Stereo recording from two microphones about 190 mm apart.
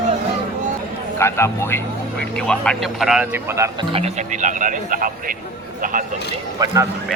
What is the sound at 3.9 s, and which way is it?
Speech, 35° right (ahead or behind).